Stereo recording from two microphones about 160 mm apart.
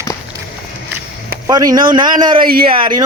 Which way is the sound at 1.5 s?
25° right (ahead or behind).